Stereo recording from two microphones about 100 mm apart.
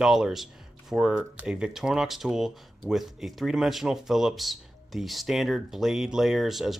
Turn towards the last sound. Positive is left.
turn(degrees=0)  # may be behind; listen again after turning